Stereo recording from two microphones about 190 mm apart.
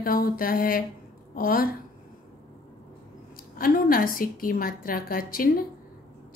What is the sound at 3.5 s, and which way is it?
A woman's voice, 50° left (ahead or behind).